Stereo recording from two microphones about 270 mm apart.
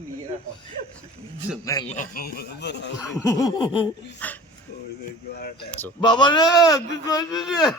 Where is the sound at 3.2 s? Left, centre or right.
Centre.